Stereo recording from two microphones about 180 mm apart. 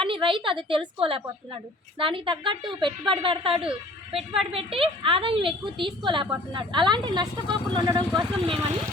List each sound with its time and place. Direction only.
0.0 s speech: 30° right (ahead or behind)